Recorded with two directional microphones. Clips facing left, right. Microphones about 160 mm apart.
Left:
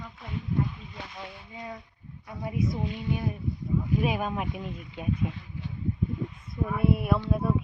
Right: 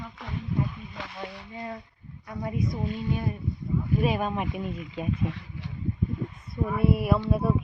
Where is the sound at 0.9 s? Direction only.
85° right.